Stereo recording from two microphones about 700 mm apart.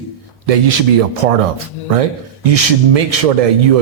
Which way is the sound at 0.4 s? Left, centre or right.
Right.